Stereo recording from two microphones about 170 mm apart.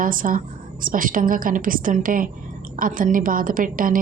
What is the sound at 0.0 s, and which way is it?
A woman's voice, 55° right (ahead or behind).